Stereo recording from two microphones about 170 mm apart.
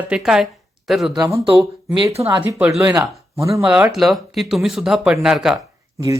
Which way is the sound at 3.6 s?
5° right (ahead or behind).